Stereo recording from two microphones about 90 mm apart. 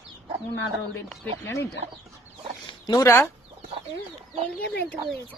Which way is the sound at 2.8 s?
45° left (ahead or behind).